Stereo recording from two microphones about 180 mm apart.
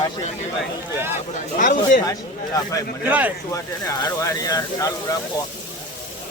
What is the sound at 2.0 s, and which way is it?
Speech, 20° left (ahead or behind).